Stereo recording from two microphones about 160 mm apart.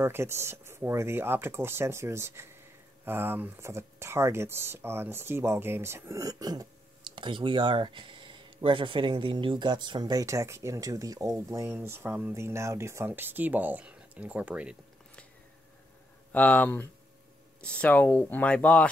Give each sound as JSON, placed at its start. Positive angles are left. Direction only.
{"t": 0.0, "sound": "speech", "side_deg": -15}
{"t": 16.3, "sound": "speech", "side_deg": 10}